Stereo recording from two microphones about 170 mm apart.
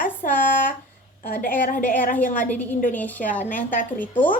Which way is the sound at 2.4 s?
10° left (ahead or behind).